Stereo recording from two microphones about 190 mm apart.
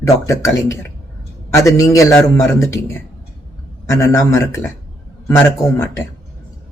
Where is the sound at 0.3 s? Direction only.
15° left (ahead or behind).